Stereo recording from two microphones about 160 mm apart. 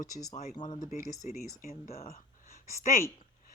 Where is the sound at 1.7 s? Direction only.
40° left (ahead or behind).